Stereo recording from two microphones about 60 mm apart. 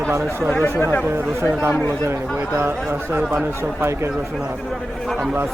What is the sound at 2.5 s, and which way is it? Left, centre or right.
Speech, right.